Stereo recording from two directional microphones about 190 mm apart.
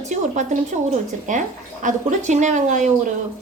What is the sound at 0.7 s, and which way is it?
A woman's voice, 45° right (ahead or behind).